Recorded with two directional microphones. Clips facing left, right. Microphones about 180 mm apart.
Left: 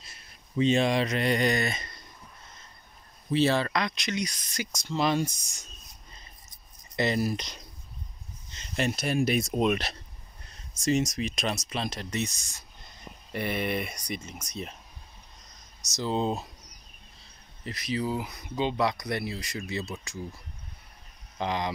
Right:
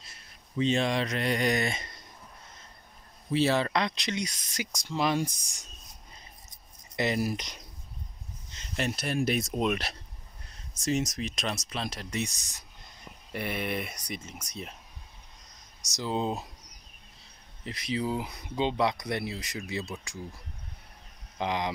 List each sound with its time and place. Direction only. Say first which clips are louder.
0.6 s speech: left 3 dB; 15° left (ahead or behind); by 1.6 s 5° right (ahead or behind)
1.6 s speech: even; 25° right (ahead or behind)
3.3 s speech: left 1 dB; 15° right (ahead or behind)
3.8 s speech: left 1 dB; 25° right (ahead or behind)
4.8 s speech: left 2 dB; 10° right (ahead or behind)
7.0 s speech: left 2 dB; 10° right (ahead or behind)
8.5 s speech: left 3 dB; centre (ahead or behind); by 12.6 s 15° right (ahead or behind)
13.3 s speech: left 3 dB; 5° right (ahead or behind)
16.0 s speech: left 2 dB; 5° right (ahead or behind)
17.6 s speech: left 1 dB; 20° right (ahead or behind)
21.4 s speech: even; 15° right (ahead or behind)